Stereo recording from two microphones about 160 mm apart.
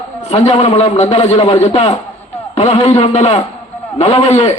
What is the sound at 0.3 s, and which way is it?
A man's voice, 40° left (ahead or behind).